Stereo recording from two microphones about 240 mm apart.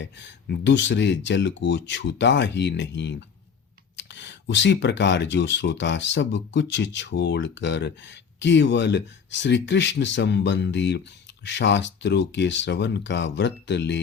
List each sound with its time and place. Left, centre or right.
0.0 s speech: left